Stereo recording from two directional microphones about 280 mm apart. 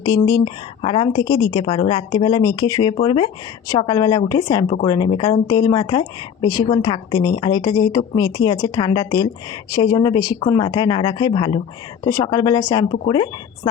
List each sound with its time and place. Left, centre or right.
0.0 s a woman's voice: centre